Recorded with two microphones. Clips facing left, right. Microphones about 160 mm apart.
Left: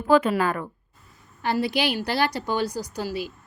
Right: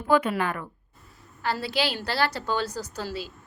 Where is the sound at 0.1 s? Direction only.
35° left (ahead or behind).